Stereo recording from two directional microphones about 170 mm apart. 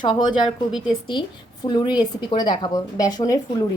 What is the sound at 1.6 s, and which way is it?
A woman's voice, 25° left (ahead or behind).